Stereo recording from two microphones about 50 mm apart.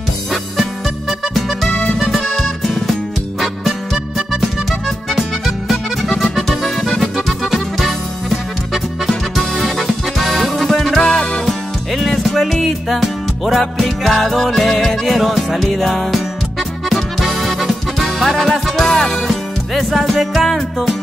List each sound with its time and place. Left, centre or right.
2.0 s music: centre
5.7 s music: centre
11.0 s music: centre
11.9 s music: centre